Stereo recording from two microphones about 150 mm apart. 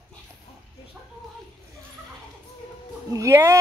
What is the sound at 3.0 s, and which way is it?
Speech, 20° right (ahead or behind).